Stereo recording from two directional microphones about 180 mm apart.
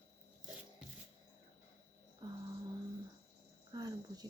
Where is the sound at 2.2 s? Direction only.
20° right (ahead or behind).